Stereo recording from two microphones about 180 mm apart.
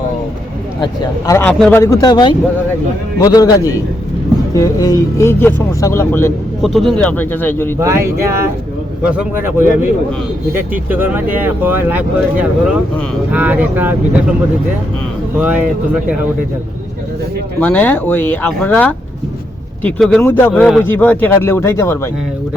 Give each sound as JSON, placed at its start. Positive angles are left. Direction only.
{"t": 1.3, "sound": "speech", "side_deg": 15}
{"t": 1.8, "sound": "a man's voice", "side_deg": 20}
{"t": 6.6, "sound": "speech", "side_deg": 0}
{"t": 7.8, "sound": "speech", "side_deg": -15}
{"t": 15.4, "sound": "speech", "side_deg": -10}
{"t": 17.6, "sound": "speech", "side_deg": 10}